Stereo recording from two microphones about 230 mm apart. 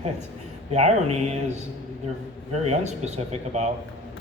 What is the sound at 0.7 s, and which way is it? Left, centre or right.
Speech, right.